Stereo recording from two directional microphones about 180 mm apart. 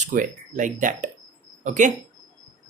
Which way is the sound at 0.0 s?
45° right (ahead or behind).